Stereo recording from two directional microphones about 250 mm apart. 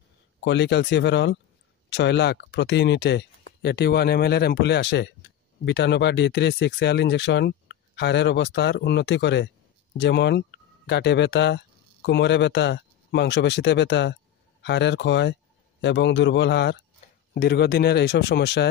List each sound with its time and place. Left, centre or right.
0.4 s speech: left